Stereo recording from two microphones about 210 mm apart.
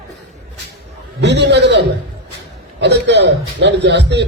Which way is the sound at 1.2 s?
55° right (ahead or behind).